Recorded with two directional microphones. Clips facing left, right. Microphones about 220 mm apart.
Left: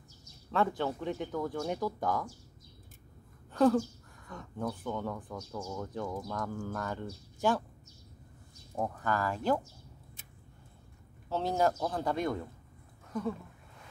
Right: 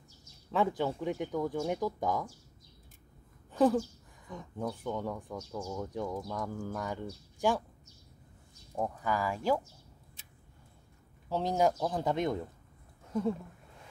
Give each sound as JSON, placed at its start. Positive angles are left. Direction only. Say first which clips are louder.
{"t": 0.5, "sound": "speech", "louder": "right 1 dB", "side_deg": -10}
{"t": 3.5, "sound": "speech", "louder": "left 1 dB", "side_deg": -15}
{"t": 8.7, "sound": "speech", "louder": "even", "side_deg": -10}
{"t": 11.2, "sound": "a man's voice", "louder": "right 1 dB", "side_deg": -15}